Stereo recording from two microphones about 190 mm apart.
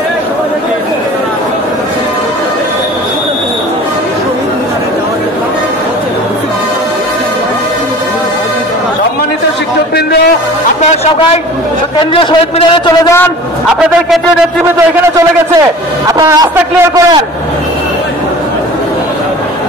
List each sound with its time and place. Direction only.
12.1 s a man's voice: 30° left (ahead or behind)
16.1 s a man's voice: 20° right (ahead or behind)